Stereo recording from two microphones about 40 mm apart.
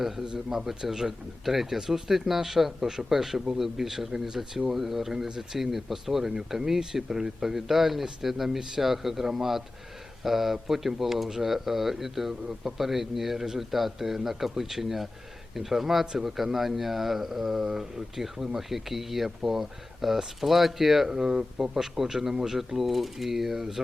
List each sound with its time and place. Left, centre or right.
0.3 s a man's voice: centre